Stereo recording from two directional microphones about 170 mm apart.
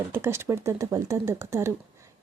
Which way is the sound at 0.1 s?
15° right (ahead or behind).